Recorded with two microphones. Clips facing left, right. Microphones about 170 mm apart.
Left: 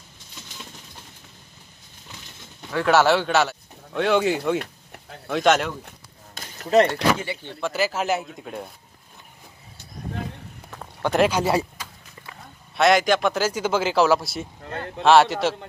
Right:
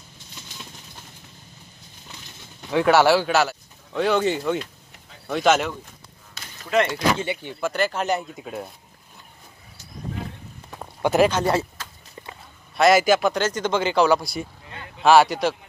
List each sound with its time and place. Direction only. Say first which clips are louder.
2.8 s speech: right 1 dB; 10° right (ahead or behind)
4.6 s a sound: left 2 dB; 60° left (ahead or behind)
5.3 s speech: even; centre (ahead or behind)
6.7 s speech: left 4 dB; 40° left (ahead or behind)
7.6 s speech: even; 5° left (ahead or behind)
10.7 s a sound: right 3 dB; 15° right (ahead or behind)
11.1 s speech: right 1 dB; 5° left (ahead or behind)
12.7 s speech: right 2 dB; 5° right (ahead or behind)
14.6 s a sound: left 8 dB; 55° left (ahead or behind)
15.0 s speech: even; centre (ahead or behind)